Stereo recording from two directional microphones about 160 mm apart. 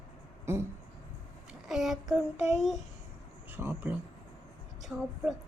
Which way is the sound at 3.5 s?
15° right (ahead or behind).